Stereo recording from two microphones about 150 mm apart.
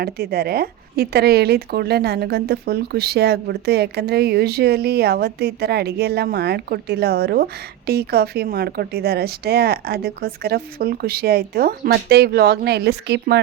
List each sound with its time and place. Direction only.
0.0 s a woman's voice: 90° right